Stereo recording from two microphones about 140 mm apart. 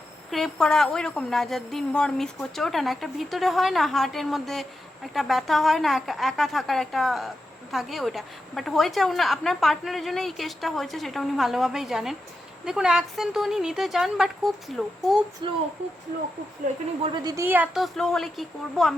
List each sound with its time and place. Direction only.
0.3 s a woman's voice: centre (ahead or behind)
15.4 s speech: 35° right (ahead or behind)
17.2 s a woman's voice: 20° right (ahead or behind)
17.7 s a woman's voice: centre (ahead or behind)